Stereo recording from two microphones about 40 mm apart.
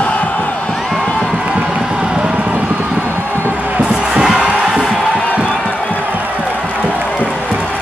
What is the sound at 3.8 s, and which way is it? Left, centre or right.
Music, centre.